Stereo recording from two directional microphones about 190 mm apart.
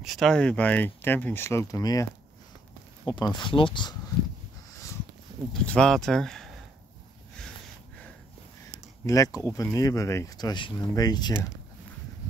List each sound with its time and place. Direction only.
0.0 s speech: centre (ahead or behind); by 2.0 s 20° left (ahead or behind)
3.1 s speech: 25° left (ahead or behind)
5.5 s speech: 5° left (ahead or behind)
9.0 s speech: 20° left (ahead or behind)